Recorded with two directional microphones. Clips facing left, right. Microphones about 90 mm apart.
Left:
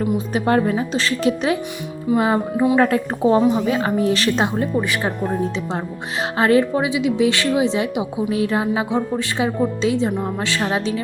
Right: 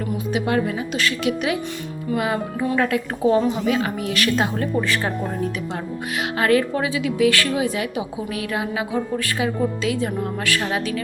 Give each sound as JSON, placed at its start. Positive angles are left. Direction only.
{"t": 0.3, "sound": "a woman's voice", "side_deg": 40}
{"t": 4.5, "sound": "speech", "side_deg": 15}
{"t": 6.3, "sound": "a woman's voice", "side_deg": 25}